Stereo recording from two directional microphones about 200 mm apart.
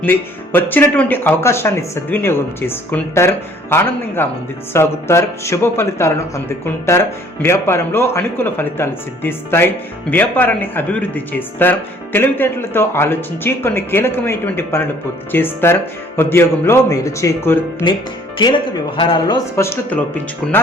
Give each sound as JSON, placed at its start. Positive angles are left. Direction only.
{"t": 0.0, "sound": "a man's voice", "side_deg": 10}
{"t": 18.3, "sound": "speech", "side_deg": 25}